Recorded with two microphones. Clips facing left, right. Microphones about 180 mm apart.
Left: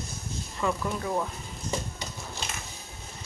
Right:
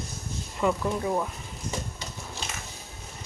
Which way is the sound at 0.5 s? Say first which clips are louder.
Right 4 dB; 20° right (ahead or behind).